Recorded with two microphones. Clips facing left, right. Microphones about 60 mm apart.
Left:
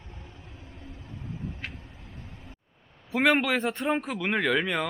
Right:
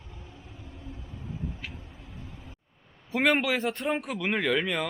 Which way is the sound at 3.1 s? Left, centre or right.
Centre.